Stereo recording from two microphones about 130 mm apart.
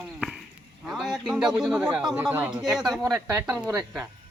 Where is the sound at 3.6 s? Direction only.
30° right (ahead or behind).